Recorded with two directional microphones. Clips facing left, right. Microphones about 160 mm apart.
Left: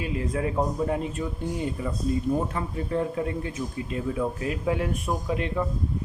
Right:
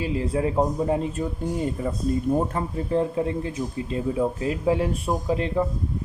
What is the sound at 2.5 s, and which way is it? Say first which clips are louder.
A man's voice: right 4 dB; 35° right (ahead or behind).